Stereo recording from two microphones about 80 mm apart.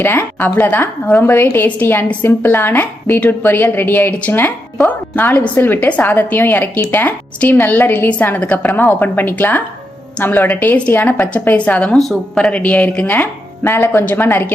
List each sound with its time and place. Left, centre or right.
0.0 s a woman's voice: left
13.7 s a woman's voice: left